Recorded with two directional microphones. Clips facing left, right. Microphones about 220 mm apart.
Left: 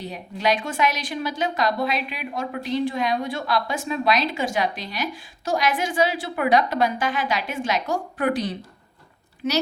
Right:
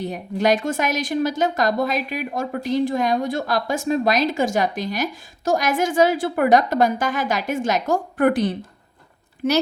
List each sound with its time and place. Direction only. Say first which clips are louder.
0.0 s a woman's voice: right 5 dB; 50° right (ahead or behind)